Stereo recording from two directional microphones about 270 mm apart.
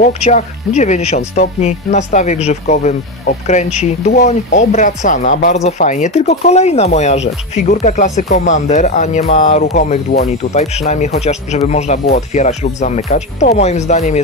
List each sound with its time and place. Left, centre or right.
0.0 s speech: left